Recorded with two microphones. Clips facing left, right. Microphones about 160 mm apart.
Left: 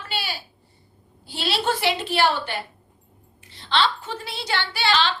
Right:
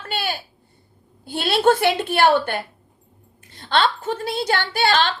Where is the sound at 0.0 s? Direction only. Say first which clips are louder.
Right 5 dB; 50° right (ahead or behind).